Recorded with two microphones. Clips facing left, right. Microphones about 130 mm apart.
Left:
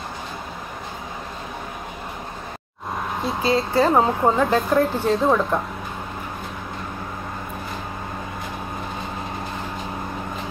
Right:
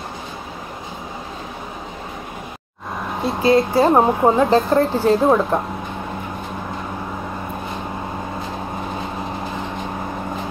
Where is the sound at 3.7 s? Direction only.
25° right (ahead or behind).